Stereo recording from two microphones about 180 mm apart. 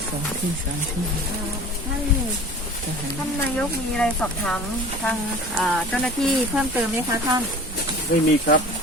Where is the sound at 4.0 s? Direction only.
5° left (ahead or behind).